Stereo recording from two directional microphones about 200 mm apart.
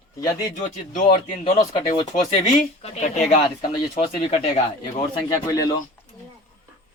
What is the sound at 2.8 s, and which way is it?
Speech, 35° left (ahead or behind).